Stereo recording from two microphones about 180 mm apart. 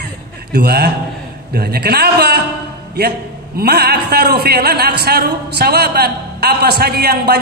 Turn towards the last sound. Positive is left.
turn(degrees=-60)  # may be behind; listen again after turning